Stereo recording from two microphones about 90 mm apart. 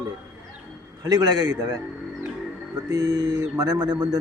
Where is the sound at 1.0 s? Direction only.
50° right (ahead or behind).